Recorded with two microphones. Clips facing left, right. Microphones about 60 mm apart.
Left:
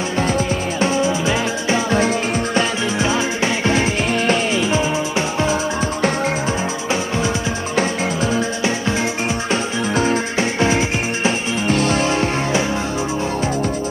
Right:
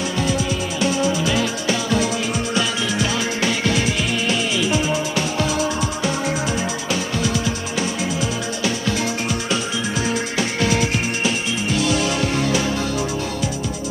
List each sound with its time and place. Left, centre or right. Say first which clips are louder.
0.2 s music: left 4 dB; left
6.9 s music: left 3 dB; left
7.7 s music: left 7 dB; left
8.6 s music: left 2 dB; left
9.9 s music: left 5 dB; left
11.6 s music: left 3 dB; left